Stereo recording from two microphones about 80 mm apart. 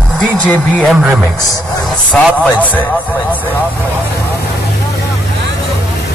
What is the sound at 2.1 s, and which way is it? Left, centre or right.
Speech, left.